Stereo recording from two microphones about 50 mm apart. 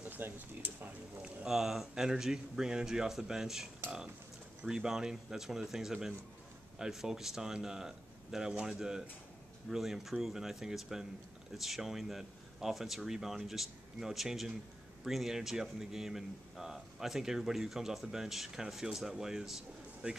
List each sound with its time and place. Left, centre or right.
0.0 s speech: right
1.5 s speech: centre
4.6 s speech: centre
20.0 s speech: right